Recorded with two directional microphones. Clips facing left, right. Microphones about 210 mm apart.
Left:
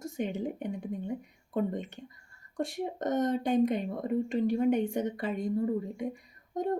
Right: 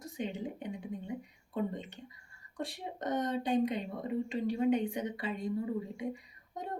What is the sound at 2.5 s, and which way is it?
Speech, 45° left (ahead or behind).